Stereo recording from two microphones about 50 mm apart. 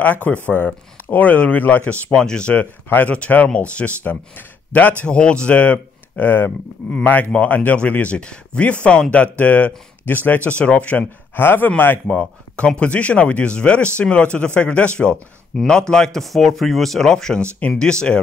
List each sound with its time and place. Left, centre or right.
0.0 s speech: left
2.1 s speech: centre
2.6 s speech: left
4.0 s speech: left
5.0 s speech: centre
11.3 s speech: left
12.1 s speech: left